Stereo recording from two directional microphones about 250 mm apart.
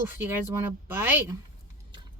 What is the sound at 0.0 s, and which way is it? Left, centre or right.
Speech, centre.